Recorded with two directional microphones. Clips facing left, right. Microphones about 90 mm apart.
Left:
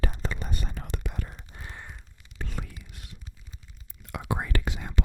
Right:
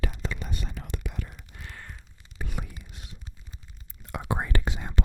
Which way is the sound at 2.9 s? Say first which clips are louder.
Right 1 dB; 20° right (ahead or behind).